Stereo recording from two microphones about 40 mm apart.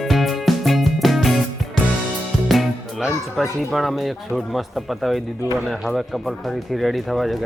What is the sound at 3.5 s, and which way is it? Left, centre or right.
Speech, centre.